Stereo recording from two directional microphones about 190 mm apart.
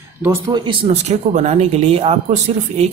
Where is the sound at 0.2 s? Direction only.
15° right (ahead or behind).